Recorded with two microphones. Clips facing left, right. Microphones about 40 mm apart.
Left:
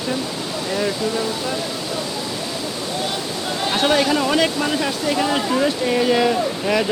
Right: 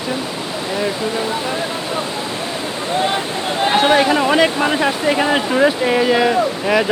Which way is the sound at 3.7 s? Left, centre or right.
Right.